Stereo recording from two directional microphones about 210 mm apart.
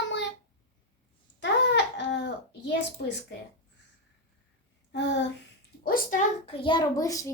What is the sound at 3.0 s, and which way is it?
Speech, 50° left (ahead or behind).